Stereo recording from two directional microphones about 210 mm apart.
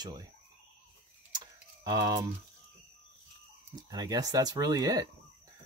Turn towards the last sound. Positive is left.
turn(degrees=-15)  # may be behind; listen again after turning